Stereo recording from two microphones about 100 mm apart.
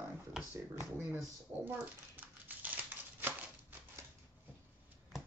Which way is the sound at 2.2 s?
15° right (ahead or behind).